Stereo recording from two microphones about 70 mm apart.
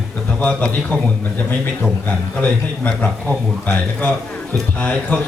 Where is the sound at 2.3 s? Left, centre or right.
Centre.